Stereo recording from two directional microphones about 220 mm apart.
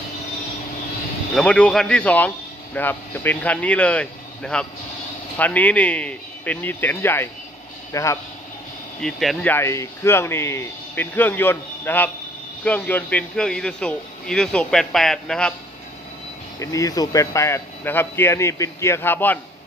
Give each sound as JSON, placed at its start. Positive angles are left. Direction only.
{"t": 1.3, "sound": "speech", "side_deg": 5}
{"t": 9.0, "sound": "speech", "side_deg": 0}
{"t": 16.5, "sound": "speech", "side_deg": 15}